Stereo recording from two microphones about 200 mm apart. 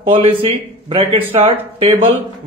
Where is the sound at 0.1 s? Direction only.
30° right (ahead or behind).